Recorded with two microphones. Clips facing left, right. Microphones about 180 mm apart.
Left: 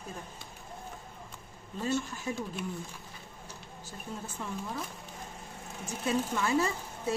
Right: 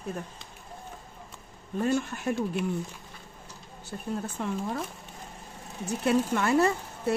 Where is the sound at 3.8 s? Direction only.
65° right (ahead or behind).